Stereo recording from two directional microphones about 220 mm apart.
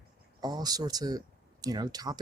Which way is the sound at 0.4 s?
15° right (ahead or behind).